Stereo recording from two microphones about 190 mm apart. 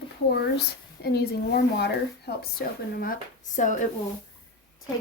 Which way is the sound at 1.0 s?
55° left (ahead or behind).